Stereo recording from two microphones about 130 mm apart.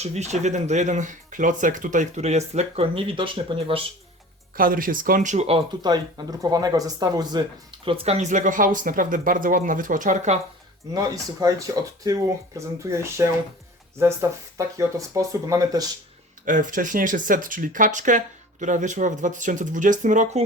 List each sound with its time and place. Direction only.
0.0 s speech: 60° right (ahead or behind); by 3.8 s 45° right (ahead or behind)
4.5 s speech: 90° right; by 5.5 s 70° right (ahead or behind)
5.8 s speech: 35° right (ahead or behind)
7.9 s speech: 55° right (ahead or behind)
10.9 s speech: 25° right (ahead or behind)
14.8 s speech: 25° right (ahead or behind)
16.5 s speech: 90° right; by 20.4 s 75° right (ahead or behind)